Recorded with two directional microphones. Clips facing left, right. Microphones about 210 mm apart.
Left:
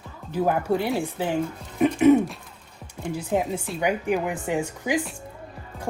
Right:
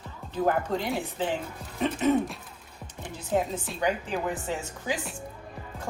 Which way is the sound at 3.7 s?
10° left (ahead or behind).